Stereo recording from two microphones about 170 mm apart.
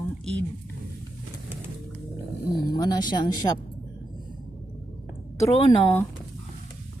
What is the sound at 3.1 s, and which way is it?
Speech, 25° left (ahead or behind).